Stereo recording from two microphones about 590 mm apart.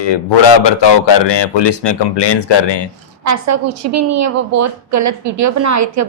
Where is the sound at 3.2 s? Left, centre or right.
Right.